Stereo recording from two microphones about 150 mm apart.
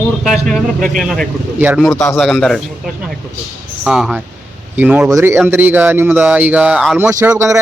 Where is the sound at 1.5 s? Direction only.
10° right (ahead or behind).